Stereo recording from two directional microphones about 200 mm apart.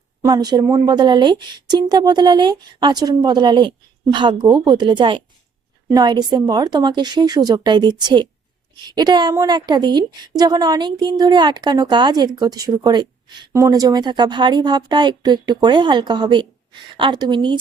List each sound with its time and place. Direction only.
0.2 s a woman's voice: 20° right (ahead or behind)